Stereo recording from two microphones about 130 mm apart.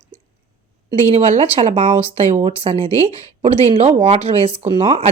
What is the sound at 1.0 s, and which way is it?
Speech, 55° right (ahead or behind).